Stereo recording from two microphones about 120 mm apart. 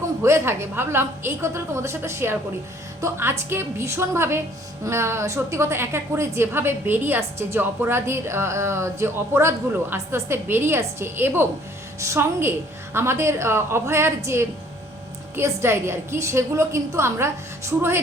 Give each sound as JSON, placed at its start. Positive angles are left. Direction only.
{"t": 0.2, "sound": "a woman's voice", "side_deg": -20}
{"t": 15.4, "sound": "a woman's voice", "side_deg": -20}